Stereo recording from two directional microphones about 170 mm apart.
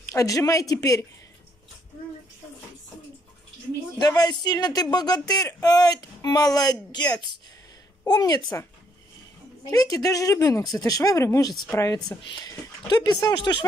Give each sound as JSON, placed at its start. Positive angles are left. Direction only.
{"t": 0.1, "sound": "speech", "side_deg": 20}
{"t": 4.0, "sound": "speech", "side_deg": 25}
{"t": 9.7, "sound": "speech", "side_deg": 20}